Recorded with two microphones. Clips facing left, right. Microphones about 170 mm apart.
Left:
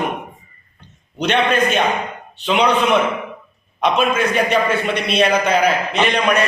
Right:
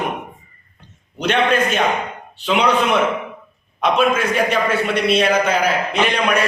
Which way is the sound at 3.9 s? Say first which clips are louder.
Right 1 dB; 5° right (ahead or behind).